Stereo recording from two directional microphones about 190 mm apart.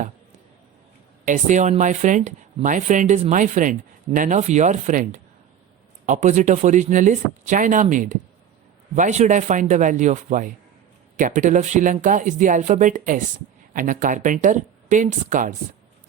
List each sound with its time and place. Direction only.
1.2 s speech: 40° right (ahead or behind)